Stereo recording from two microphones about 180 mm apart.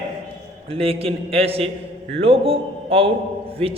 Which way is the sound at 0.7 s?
35° right (ahead or behind).